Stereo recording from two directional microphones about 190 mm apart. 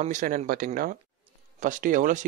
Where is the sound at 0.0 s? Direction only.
40° right (ahead or behind).